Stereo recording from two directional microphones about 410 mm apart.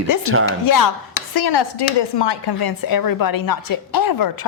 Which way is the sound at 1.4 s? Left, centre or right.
Left.